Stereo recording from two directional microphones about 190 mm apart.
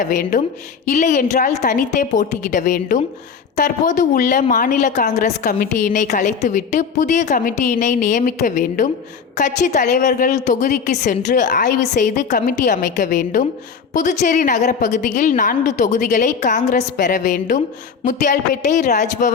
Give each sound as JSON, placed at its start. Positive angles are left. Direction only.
{"t": 0.0, "sound": "a woman's voice", "side_deg": 40}